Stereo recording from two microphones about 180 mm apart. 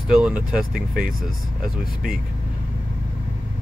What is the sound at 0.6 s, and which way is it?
Speech, 55° right (ahead or behind).